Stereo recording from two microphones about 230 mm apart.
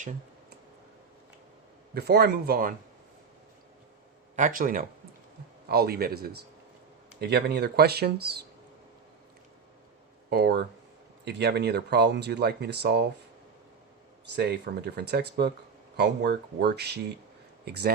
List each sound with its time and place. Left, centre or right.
2.0 s speech: right
4.4 s speech: right
10.2 s speech: right
14.3 s speech: right